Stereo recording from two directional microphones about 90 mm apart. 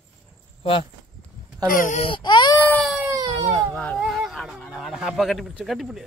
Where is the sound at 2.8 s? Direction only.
5° right (ahead or behind).